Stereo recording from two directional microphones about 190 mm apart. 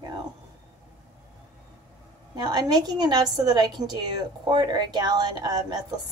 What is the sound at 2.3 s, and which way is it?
Speech, 20° right (ahead or behind).